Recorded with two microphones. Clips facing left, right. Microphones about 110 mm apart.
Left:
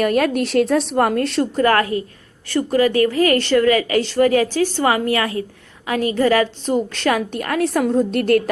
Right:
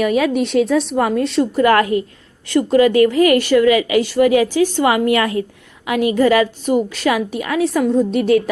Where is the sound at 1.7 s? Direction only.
20° right (ahead or behind).